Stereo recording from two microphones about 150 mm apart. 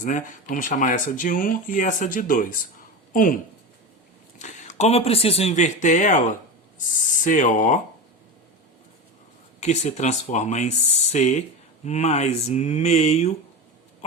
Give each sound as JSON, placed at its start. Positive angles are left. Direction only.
{"t": 0.0, "sound": "speech", "side_deg": 60}
{"t": 4.4, "sound": "speech", "side_deg": 50}
{"t": 9.6, "sound": "speech", "side_deg": 50}